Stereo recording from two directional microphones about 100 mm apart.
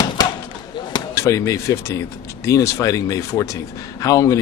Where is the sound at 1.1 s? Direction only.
30° left (ahead or behind).